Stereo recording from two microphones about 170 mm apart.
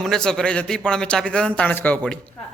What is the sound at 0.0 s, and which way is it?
A man's voice, 5° left (ahead or behind).